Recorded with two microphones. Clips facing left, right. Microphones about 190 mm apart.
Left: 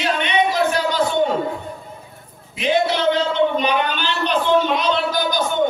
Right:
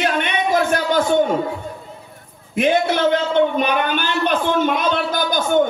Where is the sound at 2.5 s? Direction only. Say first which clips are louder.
Right 2 dB; 50° right (ahead or behind).